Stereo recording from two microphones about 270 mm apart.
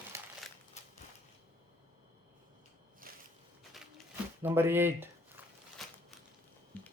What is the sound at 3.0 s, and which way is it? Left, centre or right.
Walk, right.